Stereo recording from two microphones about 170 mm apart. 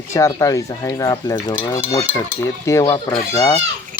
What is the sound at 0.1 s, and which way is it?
Speech, 20° left (ahead or behind).